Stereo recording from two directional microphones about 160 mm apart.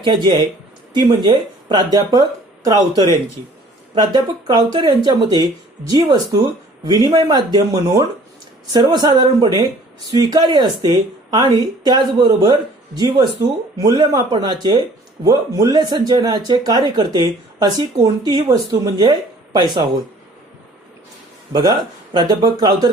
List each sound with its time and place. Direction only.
0.0 s speech: 30° right (ahead or behind)
21.5 s speech: 25° right (ahead or behind)